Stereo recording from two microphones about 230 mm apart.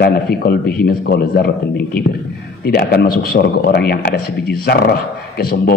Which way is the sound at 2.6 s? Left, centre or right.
Left.